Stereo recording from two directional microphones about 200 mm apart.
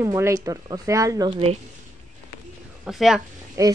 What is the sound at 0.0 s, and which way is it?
Speech, 15° right (ahead or behind).